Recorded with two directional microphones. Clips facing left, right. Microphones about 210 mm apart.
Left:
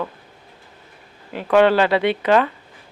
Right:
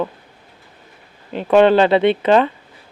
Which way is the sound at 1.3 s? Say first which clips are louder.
Right 3 dB; 25° right (ahead or behind).